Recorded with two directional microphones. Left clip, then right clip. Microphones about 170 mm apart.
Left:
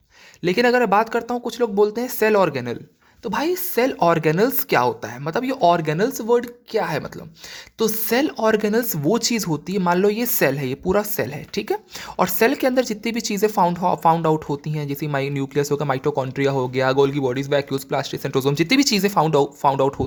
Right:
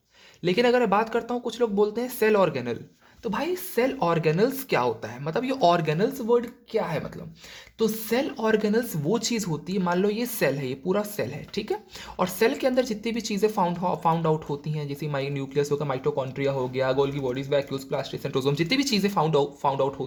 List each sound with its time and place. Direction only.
0.4 s speech: 30° left (ahead or behind)